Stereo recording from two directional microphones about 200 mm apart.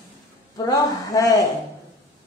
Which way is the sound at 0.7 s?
20° left (ahead or behind).